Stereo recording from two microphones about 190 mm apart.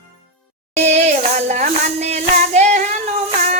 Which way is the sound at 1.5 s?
35° right (ahead or behind).